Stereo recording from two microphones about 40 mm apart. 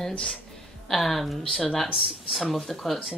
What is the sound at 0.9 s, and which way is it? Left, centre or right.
Speech, centre.